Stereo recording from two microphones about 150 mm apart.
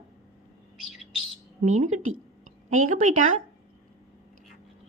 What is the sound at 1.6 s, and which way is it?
Mantra, 55° right (ahead or behind).